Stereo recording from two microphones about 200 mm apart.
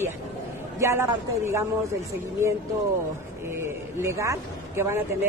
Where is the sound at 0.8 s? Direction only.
15° right (ahead or behind).